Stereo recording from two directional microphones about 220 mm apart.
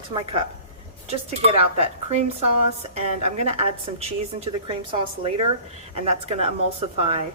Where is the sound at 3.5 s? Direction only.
30° right (ahead or behind).